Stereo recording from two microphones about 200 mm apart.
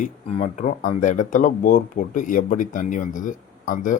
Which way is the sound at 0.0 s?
35° left (ahead or behind).